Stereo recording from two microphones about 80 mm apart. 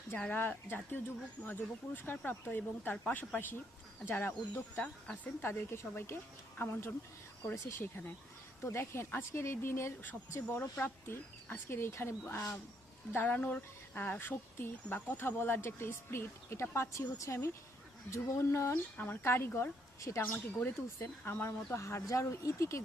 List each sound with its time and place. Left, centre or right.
0.3 s speech: left
13.1 s speech: left
18.7 s speech: left
20.6 s speech: left
21.8 s speech: left